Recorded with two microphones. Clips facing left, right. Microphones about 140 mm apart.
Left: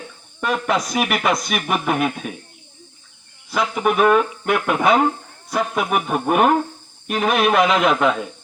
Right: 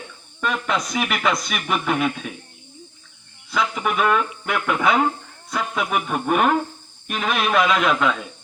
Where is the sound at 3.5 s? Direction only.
35° left (ahead or behind).